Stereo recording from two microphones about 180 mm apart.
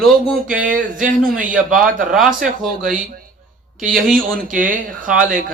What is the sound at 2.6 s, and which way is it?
Speech, centre (ahead or behind).